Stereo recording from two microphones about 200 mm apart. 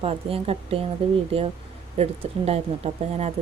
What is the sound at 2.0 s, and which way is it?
Speech, 30° right (ahead or behind).